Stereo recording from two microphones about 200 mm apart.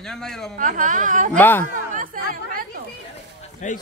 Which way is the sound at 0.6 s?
40° right (ahead or behind).